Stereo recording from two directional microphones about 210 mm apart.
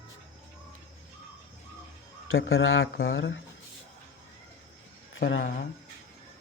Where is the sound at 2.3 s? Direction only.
70° left (ahead or behind).